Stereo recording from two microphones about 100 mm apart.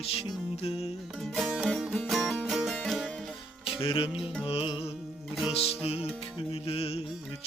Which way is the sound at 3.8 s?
70° left (ahead or behind).